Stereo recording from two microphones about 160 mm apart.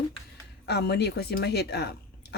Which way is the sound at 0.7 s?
90° left.